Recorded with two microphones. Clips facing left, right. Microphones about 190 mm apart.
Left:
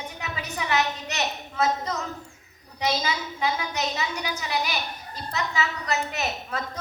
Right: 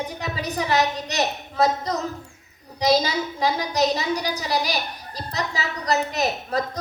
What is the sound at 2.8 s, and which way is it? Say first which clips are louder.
A woman's voice: right 7 dB; 35° right (ahead or behind).